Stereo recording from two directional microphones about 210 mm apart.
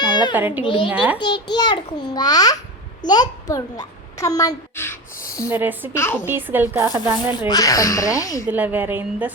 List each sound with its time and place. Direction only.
0.0 s a sound: 20° left (ahead or behind)
0.3 s a woman's voice: 10° right (ahead or behind)
0.6 s a child's voice: 25° left (ahead or behind)
0.9 s a woman's voice: 5° right (ahead or behind)
1.2 s a child's voice: 20° left (ahead or behind)
5.5 s a woman's voice: 10° right (ahead or behind)
5.9 s speech: 10° left (ahead or behind)
6.2 s a woman's voice: 10° right (ahead or behind)
6.8 s speech: 20° left (ahead or behind)
8.4 s a woman's voice: 10° right (ahead or behind)